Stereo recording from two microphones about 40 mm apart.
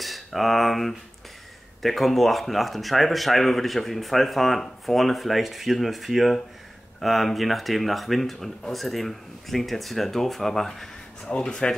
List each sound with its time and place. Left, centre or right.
0.0 s speech: centre
11.2 s speech: left